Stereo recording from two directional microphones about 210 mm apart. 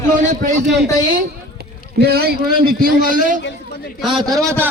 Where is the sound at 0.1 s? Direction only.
35° right (ahead or behind).